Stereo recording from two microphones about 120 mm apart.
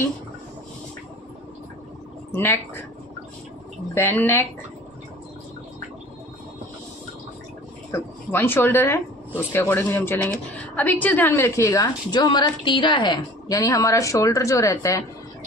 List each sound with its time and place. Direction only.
2.3 s speech: 20° left (ahead or behind)
3.9 s speech: 15° left (ahead or behind)
7.9 s speech: 15° left (ahead or behind)